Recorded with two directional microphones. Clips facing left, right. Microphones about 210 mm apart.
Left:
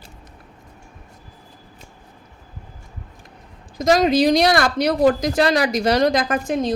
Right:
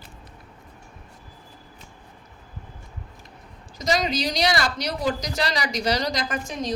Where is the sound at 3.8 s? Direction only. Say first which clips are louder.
Left 9 dB; 55° left (ahead or behind).